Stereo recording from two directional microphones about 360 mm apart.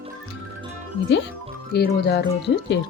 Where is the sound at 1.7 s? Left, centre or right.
Left.